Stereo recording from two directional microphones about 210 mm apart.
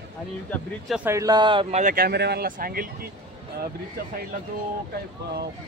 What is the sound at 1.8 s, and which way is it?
Speech, 40° right (ahead or behind).